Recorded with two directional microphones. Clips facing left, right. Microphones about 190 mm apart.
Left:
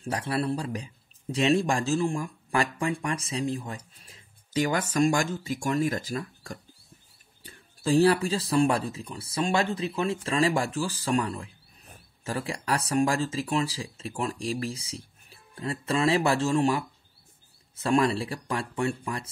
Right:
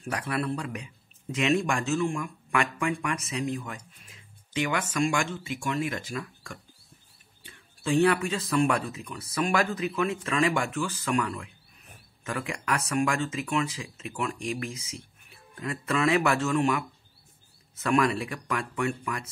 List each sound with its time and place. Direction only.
0.0 s speech: 30° left (ahead or behind)